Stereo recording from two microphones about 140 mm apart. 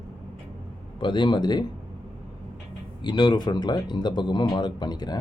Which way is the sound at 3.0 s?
35° left (ahead or behind).